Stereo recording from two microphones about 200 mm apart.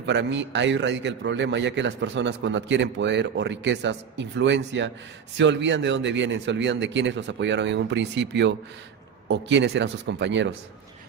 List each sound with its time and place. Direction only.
0.0 s a man's voice: 60° right (ahead or behind)